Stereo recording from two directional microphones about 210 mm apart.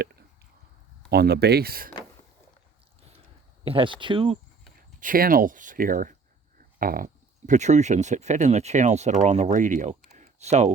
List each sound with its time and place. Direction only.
1.1 s speech: 50° right (ahead or behind)
3.6 s speech: 25° right (ahead or behind)
4.9 s speech: 40° right (ahead or behind)
10.1 s a sound: 35° right (ahead or behind)